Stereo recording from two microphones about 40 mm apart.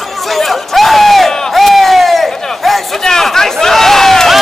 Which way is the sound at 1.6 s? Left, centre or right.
Centre.